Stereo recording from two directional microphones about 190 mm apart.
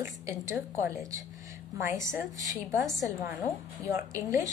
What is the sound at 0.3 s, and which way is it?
A woman's voice, 15° right (ahead or behind).